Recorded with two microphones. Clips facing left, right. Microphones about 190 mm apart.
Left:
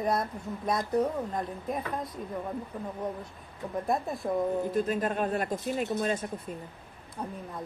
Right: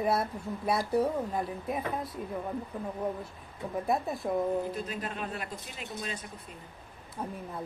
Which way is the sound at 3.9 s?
Centre (ahead or behind).